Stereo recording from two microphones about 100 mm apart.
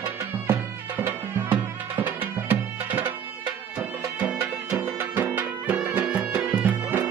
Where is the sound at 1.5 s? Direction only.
15° right (ahead or behind).